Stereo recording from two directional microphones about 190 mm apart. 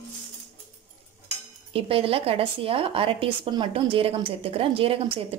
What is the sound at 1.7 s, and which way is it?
Speech, 30° right (ahead or behind).